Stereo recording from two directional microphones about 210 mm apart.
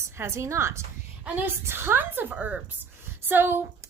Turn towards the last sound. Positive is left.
turn(degrees=-10)  # may be behind; listen again after turning